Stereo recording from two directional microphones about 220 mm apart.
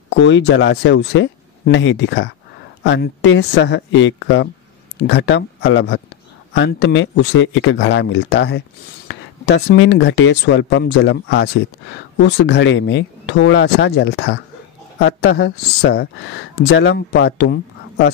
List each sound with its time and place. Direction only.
0.1 s speech: 55° left (ahead or behind)